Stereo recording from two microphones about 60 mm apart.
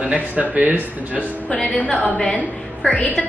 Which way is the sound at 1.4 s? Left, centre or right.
Left.